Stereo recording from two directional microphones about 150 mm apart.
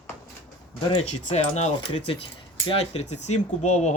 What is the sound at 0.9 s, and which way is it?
Speech, 50° left (ahead or behind).